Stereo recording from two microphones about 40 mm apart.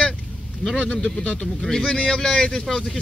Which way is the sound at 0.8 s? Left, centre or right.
Left.